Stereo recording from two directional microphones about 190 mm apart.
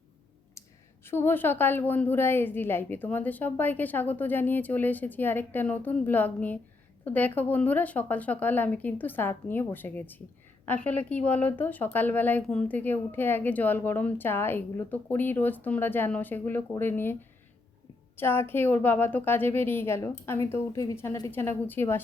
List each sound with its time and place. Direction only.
0.6 s a sound: 15° left (ahead or behind)
1.0 s a woman's voice: 10° left (ahead or behind)
18.2 s a woman's voice: 10° left (ahead or behind)